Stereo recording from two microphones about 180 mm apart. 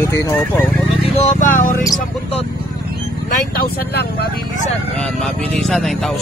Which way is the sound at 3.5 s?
60° left (ahead or behind).